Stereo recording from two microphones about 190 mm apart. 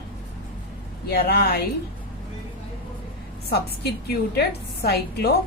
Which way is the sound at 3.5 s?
55° left (ahead or behind).